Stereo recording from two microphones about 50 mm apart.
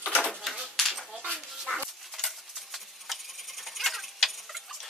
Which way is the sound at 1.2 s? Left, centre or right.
Centre.